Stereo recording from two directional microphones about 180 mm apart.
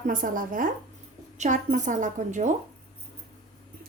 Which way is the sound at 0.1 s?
50° right (ahead or behind).